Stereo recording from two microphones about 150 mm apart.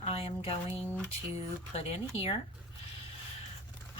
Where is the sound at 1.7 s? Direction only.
40° left (ahead or behind).